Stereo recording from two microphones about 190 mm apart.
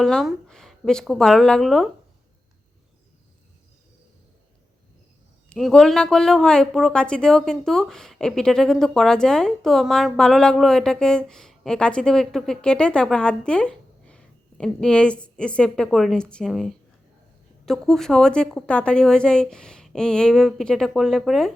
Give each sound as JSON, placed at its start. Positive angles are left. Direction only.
{"t": 0.0, "sound": "speech", "side_deg": 0}
{"t": 5.5, "sound": "speech", "side_deg": 0}
{"t": 17.7, "sound": "speech", "side_deg": 0}